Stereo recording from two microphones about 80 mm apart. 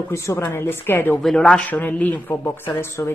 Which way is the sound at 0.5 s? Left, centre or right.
Left.